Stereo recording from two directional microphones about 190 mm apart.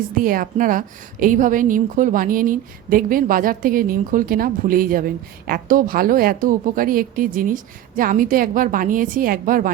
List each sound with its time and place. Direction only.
0.2 s a woman's voice: 45° right (ahead or behind)